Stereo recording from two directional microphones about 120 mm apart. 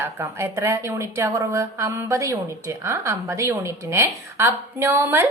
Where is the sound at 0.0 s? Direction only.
20° right (ahead or behind).